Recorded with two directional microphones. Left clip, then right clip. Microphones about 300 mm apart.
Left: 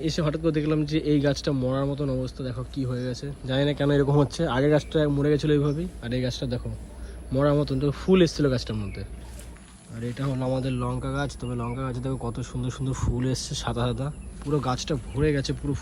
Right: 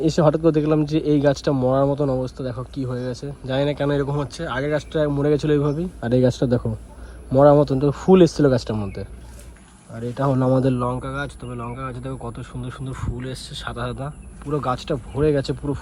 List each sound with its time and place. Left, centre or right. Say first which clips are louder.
0.0 s speech: right 9 dB; centre
6.1 s speech: right 12 dB; centre
11.4 s speech: right 1 dB; centre